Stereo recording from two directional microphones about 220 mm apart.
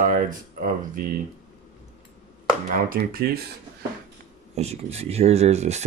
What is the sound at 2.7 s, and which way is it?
Speech, 40° right (ahead or behind).